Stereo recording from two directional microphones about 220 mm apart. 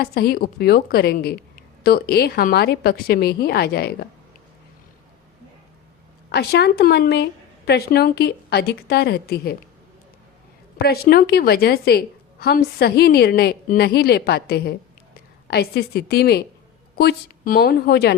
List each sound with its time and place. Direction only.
0.0 s a woman's voice: 45° left (ahead or behind)
6.3 s a woman's voice: 50° left (ahead or behind)
10.8 s a woman's voice: 45° left (ahead or behind)